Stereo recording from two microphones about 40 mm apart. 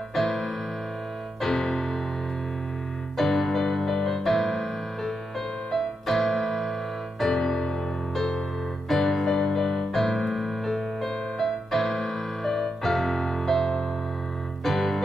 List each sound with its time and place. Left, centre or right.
0.1 s keyboard: centre
1.4 s piano: centre
3.2 s music: centre
6.0 s piano: centre
7.2 s music: centre